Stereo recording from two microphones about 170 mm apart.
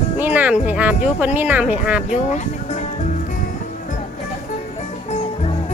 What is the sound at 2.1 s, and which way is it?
Speech, 40° left (ahead or behind).